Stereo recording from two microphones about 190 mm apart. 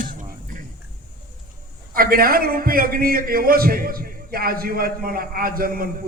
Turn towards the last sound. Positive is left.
turn(degrees=-50)  # may be behind; listen again after turning